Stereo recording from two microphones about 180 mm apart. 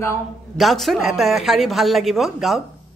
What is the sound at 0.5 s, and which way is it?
Speech, centre (ahead or behind).